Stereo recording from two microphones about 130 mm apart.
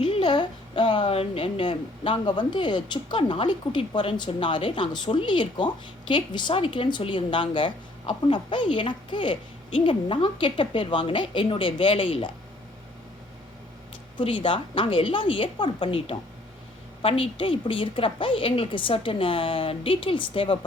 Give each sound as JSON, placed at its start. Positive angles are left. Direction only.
{"t": 0.0, "sound": "a woman's voice", "side_deg": 40}
{"t": 14.2, "sound": "a woman's voice", "side_deg": 40}